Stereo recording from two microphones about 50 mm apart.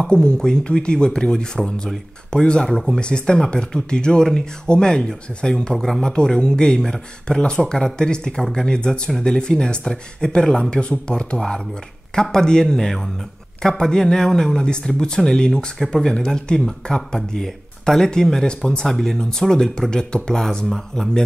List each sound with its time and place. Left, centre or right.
0.0 s speech: centre
5.8 s speech: centre
6.1 s speech: centre
8.6 s speech: centre